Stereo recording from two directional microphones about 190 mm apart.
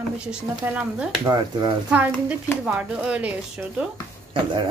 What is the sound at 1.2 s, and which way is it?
Speech, 25° right (ahead or behind).